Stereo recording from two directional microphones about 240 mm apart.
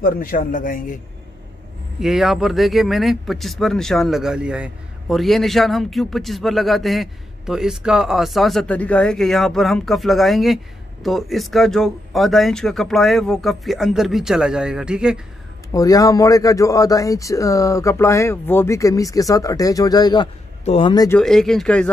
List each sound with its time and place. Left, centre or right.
0.0 s a man's voice: left
2.0 s speech: centre
15.7 s speech: centre
21.2 s speech: centre